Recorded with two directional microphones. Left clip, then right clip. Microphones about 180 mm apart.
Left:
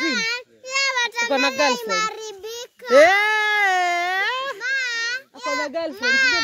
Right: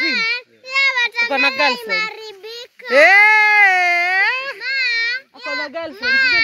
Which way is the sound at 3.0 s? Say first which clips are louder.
Right 8 dB; 35° left (ahead or behind).